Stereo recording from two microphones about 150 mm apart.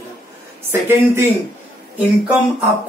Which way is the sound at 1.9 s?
10° right (ahead or behind).